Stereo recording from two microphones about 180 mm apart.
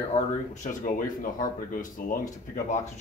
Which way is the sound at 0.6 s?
50° left (ahead or behind).